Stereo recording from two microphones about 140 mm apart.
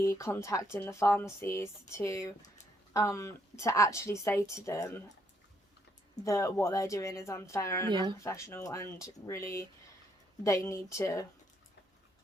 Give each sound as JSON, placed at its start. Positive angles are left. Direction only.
{"t": 0.0, "sound": "a woman's voice", "side_deg": 20}
{"t": 6.2, "sound": "a woman's voice", "side_deg": 20}